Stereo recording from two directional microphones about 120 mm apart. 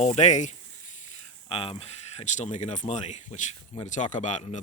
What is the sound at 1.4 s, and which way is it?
Speech, 50° left (ahead or behind).